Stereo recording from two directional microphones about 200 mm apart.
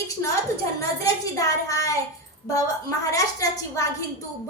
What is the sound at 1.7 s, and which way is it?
A woman's voice, 15° left (ahead or behind).